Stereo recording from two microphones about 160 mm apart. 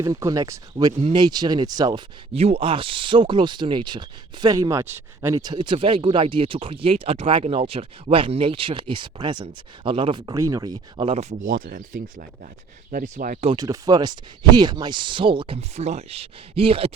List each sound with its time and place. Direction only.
0.0 s speech: 20° right (ahead or behind)
2.3 s speech: 40° right (ahead or behind); by 13.5 s 55° right (ahead or behind)
13.5 s speech: 25° right (ahead or behind)